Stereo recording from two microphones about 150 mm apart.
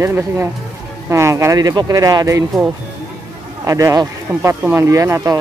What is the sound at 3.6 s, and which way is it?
Speech, 20° right (ahead or behind).